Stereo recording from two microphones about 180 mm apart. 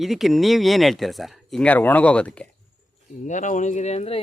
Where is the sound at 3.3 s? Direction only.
45° left (ahead or behind).